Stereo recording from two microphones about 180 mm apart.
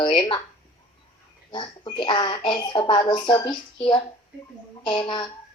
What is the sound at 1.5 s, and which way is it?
A woman's voice, 25° left (ahead or behind).